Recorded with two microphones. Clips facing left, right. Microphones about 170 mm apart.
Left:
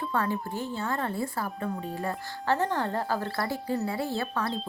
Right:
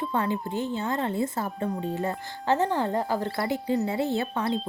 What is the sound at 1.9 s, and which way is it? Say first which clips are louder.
Speech: right 3 dB; 20° right (ahead or behind).